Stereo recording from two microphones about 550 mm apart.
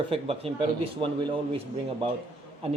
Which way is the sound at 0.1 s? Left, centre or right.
Centre.